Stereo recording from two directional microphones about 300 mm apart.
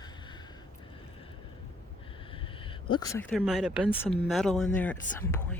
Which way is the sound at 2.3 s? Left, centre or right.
Centre.